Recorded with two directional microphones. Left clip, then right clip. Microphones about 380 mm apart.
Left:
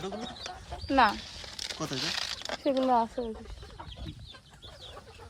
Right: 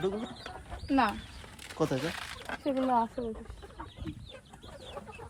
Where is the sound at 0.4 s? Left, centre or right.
Left.